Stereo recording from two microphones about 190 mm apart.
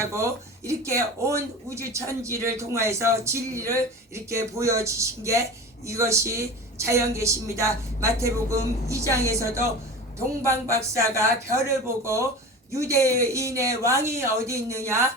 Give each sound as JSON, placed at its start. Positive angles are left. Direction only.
{"t": 0.0, "sound": "speech", "side_deg": -15}